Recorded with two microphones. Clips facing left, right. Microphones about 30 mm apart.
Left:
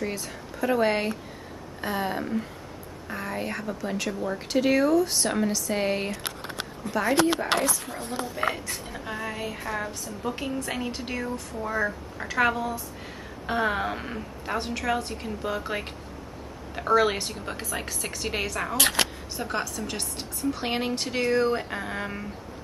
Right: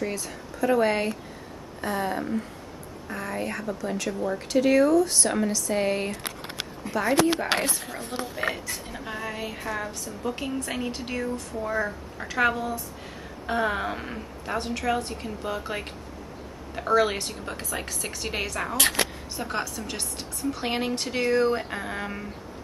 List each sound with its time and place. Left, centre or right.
0.0 s a woman's voice: centre
7.5 s speech: right
8.1 s speech: right
8.5 s a woman's voice: centre